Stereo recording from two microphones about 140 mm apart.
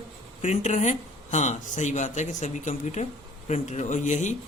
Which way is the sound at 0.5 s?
55° left (ahead or behind).